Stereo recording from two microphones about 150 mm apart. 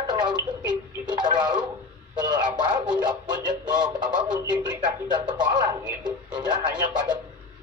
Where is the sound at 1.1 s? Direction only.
30° right (ahead or behind).